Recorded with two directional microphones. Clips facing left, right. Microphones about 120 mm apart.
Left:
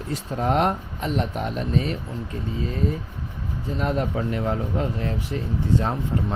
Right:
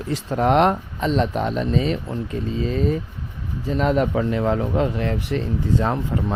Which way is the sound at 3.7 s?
90° right.